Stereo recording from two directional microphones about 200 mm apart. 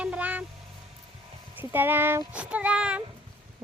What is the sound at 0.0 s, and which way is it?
Vehicle, 5° right (ahead or behind).